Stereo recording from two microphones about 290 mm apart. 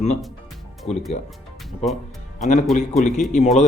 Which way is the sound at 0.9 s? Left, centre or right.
Left.